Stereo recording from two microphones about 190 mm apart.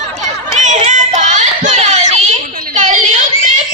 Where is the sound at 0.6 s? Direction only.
40° right (ahead or behind).